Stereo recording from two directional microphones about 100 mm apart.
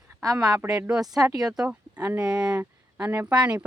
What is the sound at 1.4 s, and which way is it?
Speech, 5° right (ahead or behind).